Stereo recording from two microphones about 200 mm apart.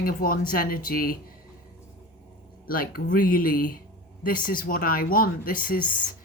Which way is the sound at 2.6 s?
45° left (ahead or behind).